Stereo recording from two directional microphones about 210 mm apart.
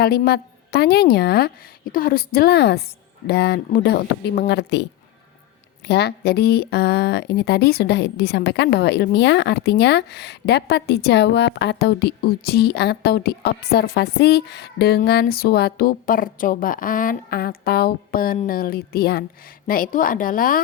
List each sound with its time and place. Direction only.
0.0 s a woman's voice: 50° left (ahead or behind)